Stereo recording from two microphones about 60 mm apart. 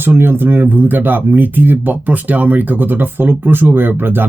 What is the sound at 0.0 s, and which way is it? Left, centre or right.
Speech, right.